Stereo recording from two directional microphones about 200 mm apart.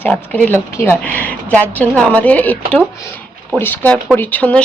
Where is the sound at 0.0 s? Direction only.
10° left (ahead or behind).